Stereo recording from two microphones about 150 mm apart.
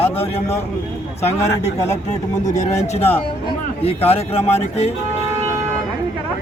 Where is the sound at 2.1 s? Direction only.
55° left (ahead or behind).